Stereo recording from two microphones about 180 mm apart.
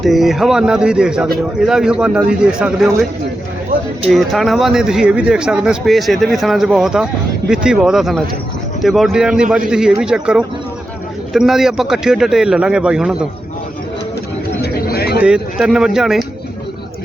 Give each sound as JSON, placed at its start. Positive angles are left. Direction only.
{"t": 0.0, "sound": "speech", "side_deg": 0}
{"t": 4.1, "sound": "speech", "side_deg": 0}
{"t": 14.6, "sound": "a sound", "side_deg": 60}
{"t": 15.2, "sound": "speech", "side_deg": -5}